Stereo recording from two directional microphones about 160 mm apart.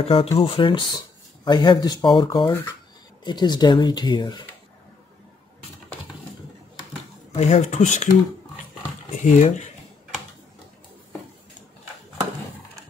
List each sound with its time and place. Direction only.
0.0 s speech: 35° left (ahead or behind)
7.3 s speech: 45° left (ahead or behind)
9.1 s speech: 50° left (ahead or behind)